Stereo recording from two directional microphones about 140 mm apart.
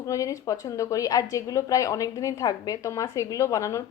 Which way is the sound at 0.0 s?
25° left (ahead or behind).